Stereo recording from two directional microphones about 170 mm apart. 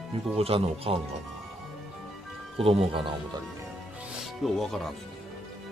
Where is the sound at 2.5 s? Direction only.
35° right (ahead or behind).